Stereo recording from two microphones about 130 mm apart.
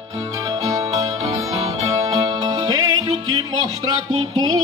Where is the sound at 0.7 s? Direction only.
25° right (ahead or behind).